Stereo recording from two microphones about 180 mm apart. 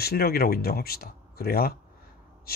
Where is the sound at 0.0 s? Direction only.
60° left (ahead or behind).